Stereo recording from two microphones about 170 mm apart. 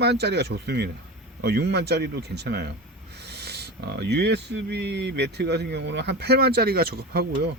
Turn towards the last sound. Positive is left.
turn(degrees=-70)  # may be behind; listen again after turning